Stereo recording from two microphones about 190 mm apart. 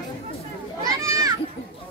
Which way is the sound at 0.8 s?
15° right (ahead or behind).